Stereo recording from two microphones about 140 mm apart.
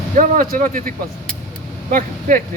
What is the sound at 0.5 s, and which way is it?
Speech, 80° right.